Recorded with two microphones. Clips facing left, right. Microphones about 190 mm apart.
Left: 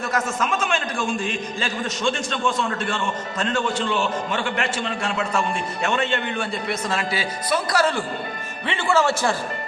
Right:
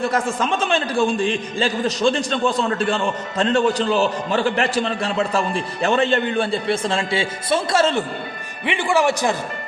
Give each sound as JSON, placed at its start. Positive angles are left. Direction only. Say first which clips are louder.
{"t": 0.0, "sound": "a man's voice", "louder": "right 4 dB", "side_deg": -30}